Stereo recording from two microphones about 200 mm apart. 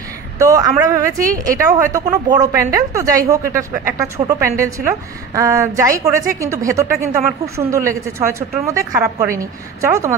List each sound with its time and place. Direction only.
0.4 s a woman's voice: 15° right (ahead or behind)